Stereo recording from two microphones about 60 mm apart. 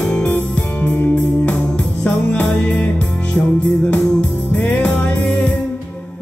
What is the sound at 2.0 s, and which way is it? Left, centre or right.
Music, left.